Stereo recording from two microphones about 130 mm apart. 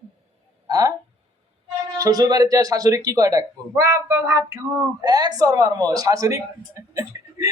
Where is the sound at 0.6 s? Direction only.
25° right (ahead or behind).